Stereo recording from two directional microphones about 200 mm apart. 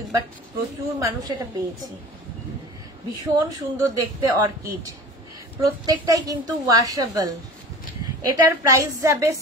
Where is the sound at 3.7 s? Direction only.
15° right (ahead or behind).